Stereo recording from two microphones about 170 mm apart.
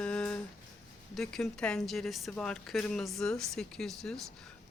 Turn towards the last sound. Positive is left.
turn(degrees=5)  # may be behind; listen again after turning